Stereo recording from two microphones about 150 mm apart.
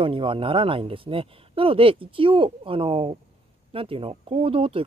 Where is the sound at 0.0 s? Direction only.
35° right (ahead or behind).